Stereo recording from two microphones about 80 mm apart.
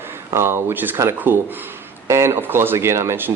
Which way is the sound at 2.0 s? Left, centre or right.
Right.